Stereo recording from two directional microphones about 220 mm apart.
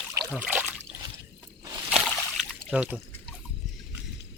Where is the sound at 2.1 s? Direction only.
Centre (ahead or behind).